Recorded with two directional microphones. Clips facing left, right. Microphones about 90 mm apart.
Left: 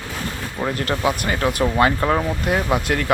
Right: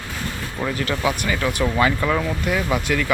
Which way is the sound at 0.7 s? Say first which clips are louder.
Left 1 dB; 45° left (ahead or behind).